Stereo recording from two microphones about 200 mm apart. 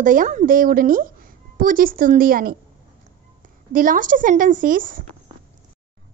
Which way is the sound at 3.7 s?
45° right (ahead or behind).